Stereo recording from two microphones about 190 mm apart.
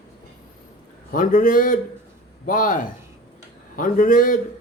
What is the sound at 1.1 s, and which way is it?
Speech, 45° left (ahead or behind).